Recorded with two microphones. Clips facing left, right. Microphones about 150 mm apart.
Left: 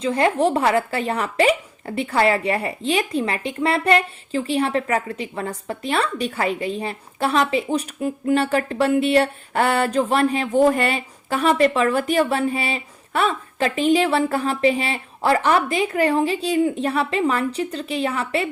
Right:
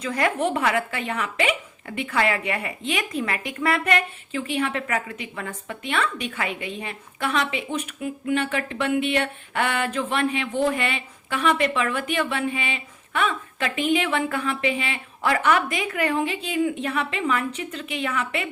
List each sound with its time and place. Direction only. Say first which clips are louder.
0.0 s a woman's voice: left 5 dB; 25° left (ahead or behind)